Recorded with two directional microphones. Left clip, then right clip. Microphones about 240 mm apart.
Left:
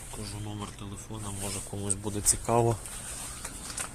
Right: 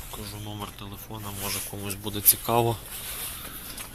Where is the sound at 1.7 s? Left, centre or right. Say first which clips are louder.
Right 1 dB; centre.